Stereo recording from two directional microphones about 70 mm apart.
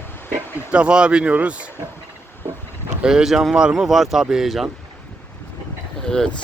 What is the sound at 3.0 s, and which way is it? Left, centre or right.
Speech, centre.